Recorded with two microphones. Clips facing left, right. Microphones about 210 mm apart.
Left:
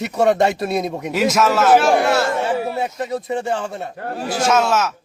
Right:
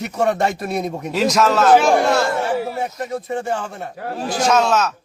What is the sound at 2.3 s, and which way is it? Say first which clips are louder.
Speech: left 1 dB; 20° left (ahead or behind).